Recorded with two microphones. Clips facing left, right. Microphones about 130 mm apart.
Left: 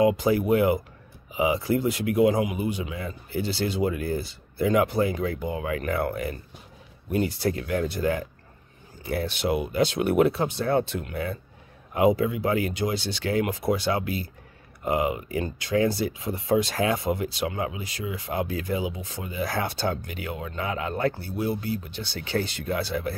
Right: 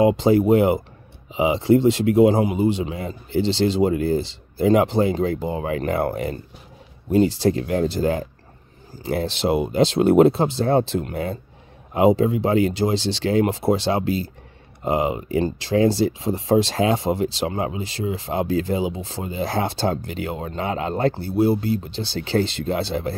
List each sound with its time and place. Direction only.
0.0 s speech: 25° right (ahead or behind)